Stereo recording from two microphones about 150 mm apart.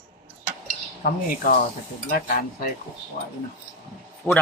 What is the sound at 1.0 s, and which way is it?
Speech, 60° left (ahead or behind).